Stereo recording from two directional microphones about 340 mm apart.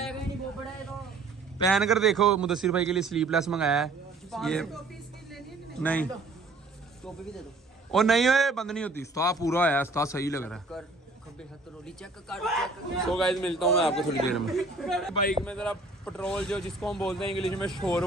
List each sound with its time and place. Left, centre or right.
1.6 s a man's voice: centre
5.3 s a sound: centre
7.9 s a man's voice: centre
11.8 s a man's voice: centre